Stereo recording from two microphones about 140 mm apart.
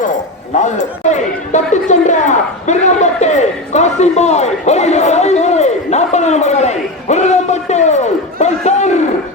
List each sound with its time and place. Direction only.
0.6 s speech: 55° left (ahead or behind)